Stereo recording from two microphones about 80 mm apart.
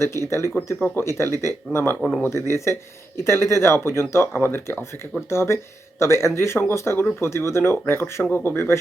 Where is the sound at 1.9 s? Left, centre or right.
Centre.